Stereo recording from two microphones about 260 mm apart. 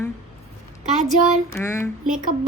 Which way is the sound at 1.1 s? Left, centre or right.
Centre.